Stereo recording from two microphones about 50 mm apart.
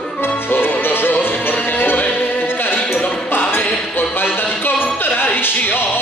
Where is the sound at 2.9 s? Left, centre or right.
Left.